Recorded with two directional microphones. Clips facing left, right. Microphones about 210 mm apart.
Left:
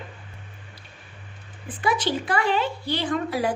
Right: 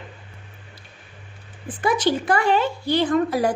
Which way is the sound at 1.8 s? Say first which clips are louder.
Right 4 dB; 45° right (ahead or behind).